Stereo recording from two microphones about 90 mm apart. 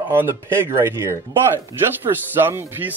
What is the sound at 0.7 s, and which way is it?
Speech, 30° right (ahead or behind).